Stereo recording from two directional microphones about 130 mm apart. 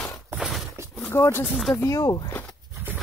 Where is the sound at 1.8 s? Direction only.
25° left (ahead or behind).